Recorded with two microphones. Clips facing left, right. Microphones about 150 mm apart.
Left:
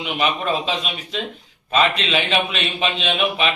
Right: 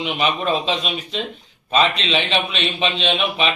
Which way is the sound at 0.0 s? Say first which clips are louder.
Right 1 dB; 5° left (ahead or behind).